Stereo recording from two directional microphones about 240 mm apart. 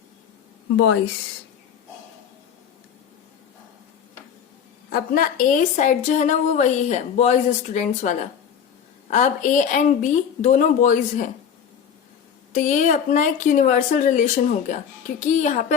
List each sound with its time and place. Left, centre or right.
0.8 s speech: left
4.9 s a woman's voice: left
12.5 s a woman's voice: left